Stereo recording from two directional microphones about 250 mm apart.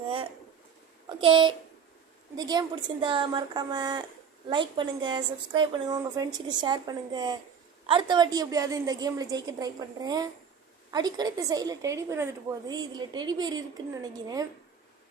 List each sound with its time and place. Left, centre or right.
1.2 s a woman's voice: centre